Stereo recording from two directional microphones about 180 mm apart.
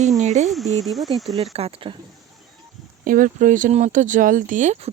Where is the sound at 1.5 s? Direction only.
30° right (ahead or behind).